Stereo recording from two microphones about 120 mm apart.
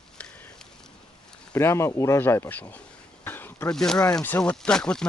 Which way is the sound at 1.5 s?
20° left (ahead or behind).